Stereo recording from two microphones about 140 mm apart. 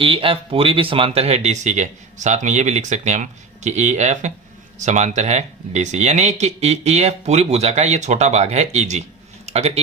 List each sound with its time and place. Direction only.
0.0 s speech: 40° right (ahead or behind)